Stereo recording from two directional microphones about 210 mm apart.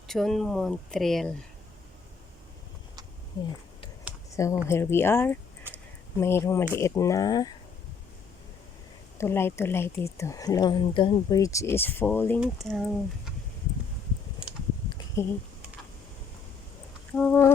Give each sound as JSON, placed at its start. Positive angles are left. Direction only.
{"t": 0.1, "sound": "speech", "side_deg": 0}
{"t": 3.3, "sound": "speech", "side_deg": 20}
{"t": 5.7, "sound": "a sound", "side_deg": -10}
{"t": 6.1, "sound": "speech", "side_deg": 10}
{"t": 9.1, "sound": "speech", "side_deg": 10}
{"t": 12.4, "sound": "speech", "side_deg": 0}
{"t": 14.8, "sound": "a sound", "side_deg": 15}
{"t": 17.2, "sound": "speech", "side_deg": 10}